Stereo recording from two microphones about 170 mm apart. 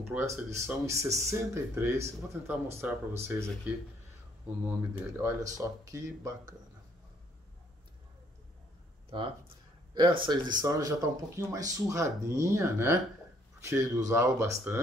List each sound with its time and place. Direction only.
0.0 s speech: 15° right (ahead or behind)
9.1 s speech: 30° right (ahead or behind)